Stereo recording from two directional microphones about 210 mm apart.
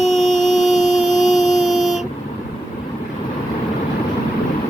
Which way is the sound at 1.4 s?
Centre (ahead or behind).